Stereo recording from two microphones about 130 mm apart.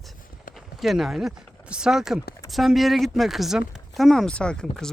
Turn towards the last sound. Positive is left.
turn(degrees=5)  # may be behind; listen again after turning